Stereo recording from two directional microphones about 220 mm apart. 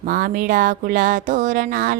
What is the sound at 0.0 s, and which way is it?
Speech, 40° right (ahead or behind).